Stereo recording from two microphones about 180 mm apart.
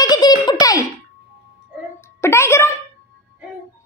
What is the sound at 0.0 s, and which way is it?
Baby laughter, 25° left (ahead or behind).